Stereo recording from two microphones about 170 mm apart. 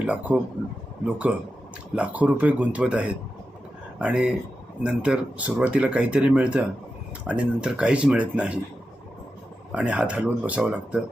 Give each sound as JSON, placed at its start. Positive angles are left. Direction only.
{"t": 0.3, "sound": "a man's voice", "side_deg": -5}
{"t": 9.7, "sound": "speech", "side_deg": -10}